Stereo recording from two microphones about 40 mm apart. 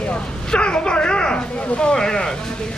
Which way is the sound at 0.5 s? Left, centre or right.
Left.